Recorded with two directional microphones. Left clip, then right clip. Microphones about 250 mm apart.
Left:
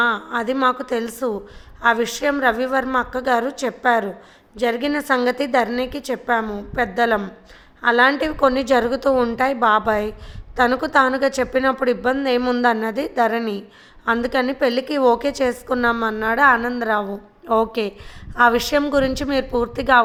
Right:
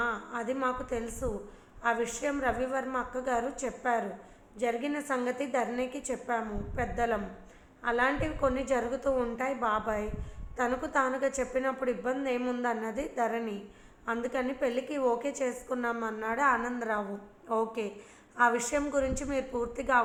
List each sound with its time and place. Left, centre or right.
0.0 s a woman's voice: left